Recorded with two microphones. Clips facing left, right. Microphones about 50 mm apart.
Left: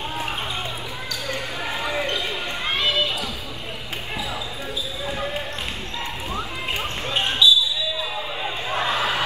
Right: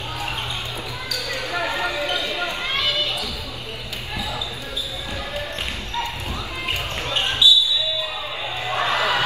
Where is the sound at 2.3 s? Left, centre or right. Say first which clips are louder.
Right 1 dB; right.